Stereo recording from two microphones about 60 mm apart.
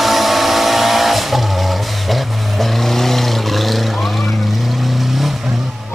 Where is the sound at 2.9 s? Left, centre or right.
Centre.